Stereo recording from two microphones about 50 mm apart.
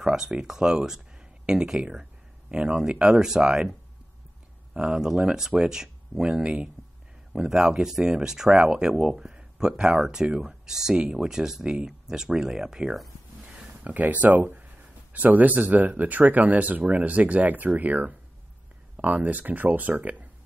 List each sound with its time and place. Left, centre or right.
0.0 s speech: centre
4.7 s speech: centre
13.8 s speech: right